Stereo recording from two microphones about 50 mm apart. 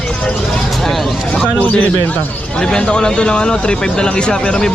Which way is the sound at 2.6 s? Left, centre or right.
Centre.